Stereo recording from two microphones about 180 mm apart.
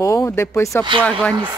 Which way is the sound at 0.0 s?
15° left (ahead or behind).